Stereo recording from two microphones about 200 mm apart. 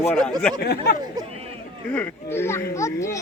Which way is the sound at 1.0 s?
20° right (ahead or behind).